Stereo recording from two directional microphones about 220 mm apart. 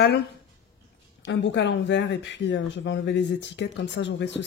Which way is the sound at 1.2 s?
55° left (ahead or behind).